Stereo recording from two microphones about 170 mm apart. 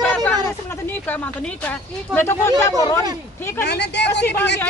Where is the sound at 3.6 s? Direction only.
80° left.